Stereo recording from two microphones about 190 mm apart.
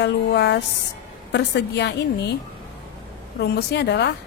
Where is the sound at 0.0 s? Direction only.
65° left (ahead or behind).